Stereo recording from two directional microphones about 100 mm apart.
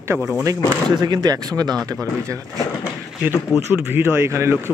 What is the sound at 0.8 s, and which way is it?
Speech, 45° right (ahead or behind).